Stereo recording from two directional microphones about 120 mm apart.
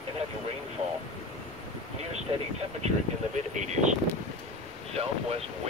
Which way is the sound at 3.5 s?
85° right.